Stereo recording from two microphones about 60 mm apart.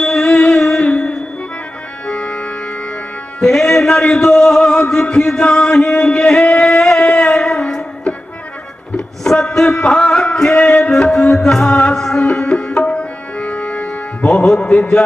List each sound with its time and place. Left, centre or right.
0.0 s music: centre
2.0 s organ: centre
3.4 s a man's voice: centre
7.1 s music: centre
9.0 s a sound: centre
10.9 s a man's voice: centre
11.5 s music: centre
12.8 s tabla: left
14.3 s a man's voice: centre